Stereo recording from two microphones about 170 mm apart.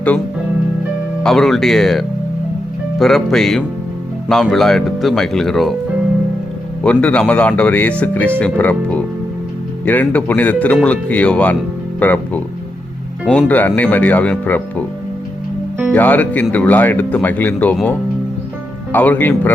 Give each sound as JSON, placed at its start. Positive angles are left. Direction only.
{"t": 1.2, "sound": "speech", "side_deg": 0}
{"t": 6.8, "sound": "speech", "side_deg": 5}
{"t": 13.5, "sound": "speech", "side_deg": 10}
{"t": 15.9, "sound": "speech", "side_deg": 10}